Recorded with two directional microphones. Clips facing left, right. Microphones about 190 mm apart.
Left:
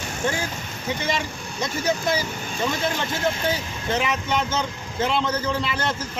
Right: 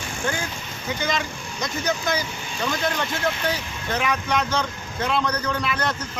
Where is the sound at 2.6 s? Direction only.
Centre (ahead or behind).